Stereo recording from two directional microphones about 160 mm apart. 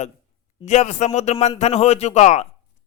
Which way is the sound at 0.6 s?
45° left (ahead or behind).